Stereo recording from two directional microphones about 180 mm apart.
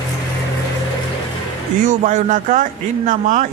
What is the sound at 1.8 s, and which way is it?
A man's voice, 45° right (ahead or behind).